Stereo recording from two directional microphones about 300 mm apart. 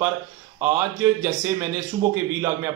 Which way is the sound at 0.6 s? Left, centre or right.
Centre.